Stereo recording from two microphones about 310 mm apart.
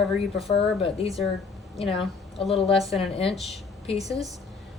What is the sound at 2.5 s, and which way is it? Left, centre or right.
Speech, centre.